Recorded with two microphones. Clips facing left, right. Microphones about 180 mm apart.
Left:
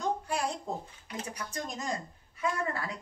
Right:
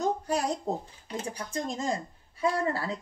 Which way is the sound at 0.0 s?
40° right (ahead or behind).